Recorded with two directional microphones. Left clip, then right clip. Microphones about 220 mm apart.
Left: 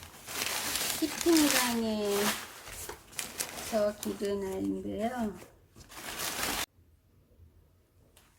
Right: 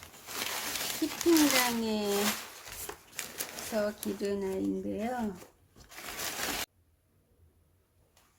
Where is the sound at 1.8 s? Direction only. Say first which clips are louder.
Even; 40° right (ahead or behind).